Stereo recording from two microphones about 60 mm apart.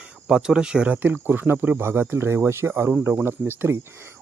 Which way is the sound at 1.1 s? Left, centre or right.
Right.